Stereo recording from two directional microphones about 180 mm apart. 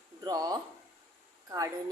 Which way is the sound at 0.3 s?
20° right (ahead or behind).